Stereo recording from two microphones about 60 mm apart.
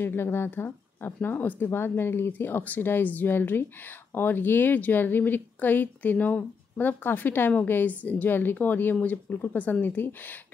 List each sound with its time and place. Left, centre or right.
0.0 s speech: left